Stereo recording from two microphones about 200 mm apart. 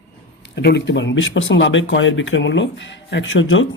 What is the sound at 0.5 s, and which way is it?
Speech, 55° left (ahead or behind).